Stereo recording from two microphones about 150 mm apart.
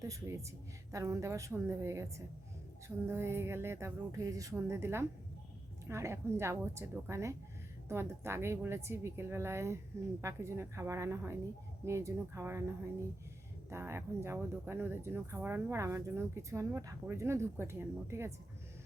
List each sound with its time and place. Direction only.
0.0 s a woman's voice: 20° right (ahead or behind)